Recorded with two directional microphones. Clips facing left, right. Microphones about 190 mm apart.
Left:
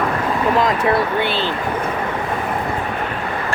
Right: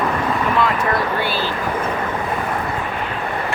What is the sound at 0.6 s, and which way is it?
Speech, 25° left (ahead or behind).